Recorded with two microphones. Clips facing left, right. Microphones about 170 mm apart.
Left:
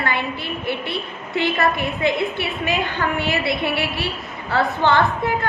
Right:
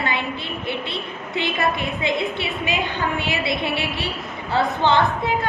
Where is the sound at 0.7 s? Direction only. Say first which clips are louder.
Left 2 dB; 20° right (ahead or behind).